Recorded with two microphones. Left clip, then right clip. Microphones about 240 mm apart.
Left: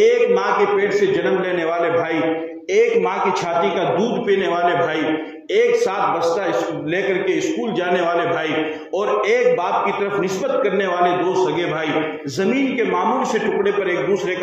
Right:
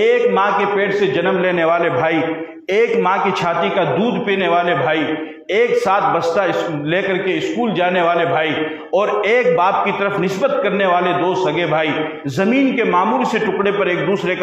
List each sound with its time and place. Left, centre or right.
0.0 s a man's voice: right
2.7 s music: right
4.3 s a man's voice: right
8.9 s music: right
10.6 s a man's voice: right